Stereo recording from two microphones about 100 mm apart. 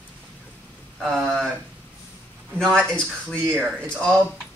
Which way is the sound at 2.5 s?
5° left (ahead or behind).